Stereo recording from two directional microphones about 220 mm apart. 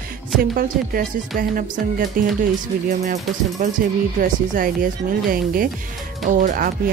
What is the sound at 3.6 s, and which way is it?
Speech, 40° right (ahead or behind).